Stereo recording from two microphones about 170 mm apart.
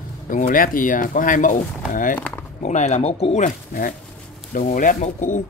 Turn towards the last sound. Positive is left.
turn(degrees=50)  # may be behind; listen again after turning